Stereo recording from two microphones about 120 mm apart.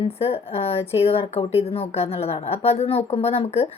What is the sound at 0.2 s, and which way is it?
Speech, 55° left (ahead or behind).